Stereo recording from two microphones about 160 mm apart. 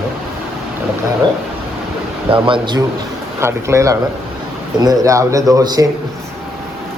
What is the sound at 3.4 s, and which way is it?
Speech, 15° right (ahead or behind).